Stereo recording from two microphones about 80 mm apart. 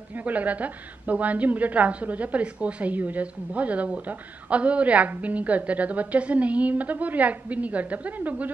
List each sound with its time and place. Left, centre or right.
0.1 s a woman's voice: centre